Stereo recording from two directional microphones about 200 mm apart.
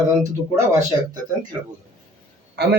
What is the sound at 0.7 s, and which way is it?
Speech, 35° right (ahead or behind).